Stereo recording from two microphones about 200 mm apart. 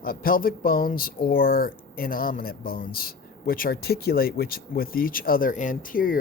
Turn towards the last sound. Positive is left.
turn(degrees=45)  # may be behind; listen again after turning